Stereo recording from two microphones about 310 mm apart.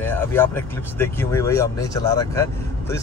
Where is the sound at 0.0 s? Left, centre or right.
Centre.